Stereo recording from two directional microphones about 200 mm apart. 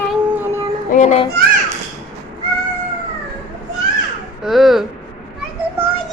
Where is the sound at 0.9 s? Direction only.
35° left (ahead or behind).